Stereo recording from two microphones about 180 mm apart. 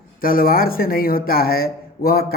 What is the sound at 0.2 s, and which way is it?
A man's voice, 50° left (ahead or behind).